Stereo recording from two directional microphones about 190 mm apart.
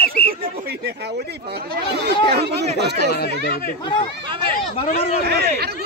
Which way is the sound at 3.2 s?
55° left (ahead or behind).